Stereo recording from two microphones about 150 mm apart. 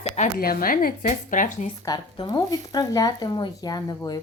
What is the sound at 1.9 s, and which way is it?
Speech, 30° left (ahead or behind).